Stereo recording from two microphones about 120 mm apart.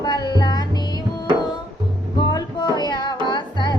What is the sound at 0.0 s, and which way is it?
Music, 35° left (ahead or behind).